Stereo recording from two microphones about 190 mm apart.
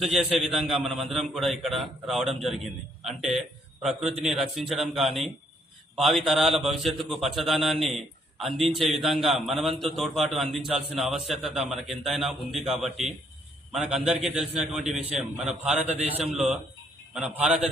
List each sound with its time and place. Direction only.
0.0 s a man's voice: centre (ahead or behind)
15.9 s a man's voice: 35° right (ahead or behind)
17.2 s a man's voice: 5° right (ahead or behind)